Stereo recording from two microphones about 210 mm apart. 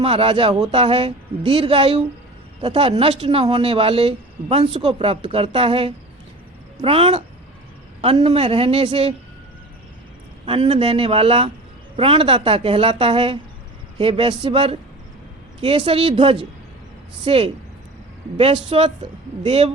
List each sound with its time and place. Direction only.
0.0 s speech: 25° right (ahead or behind)
10.4 s speech: 25° right (ahead or behind)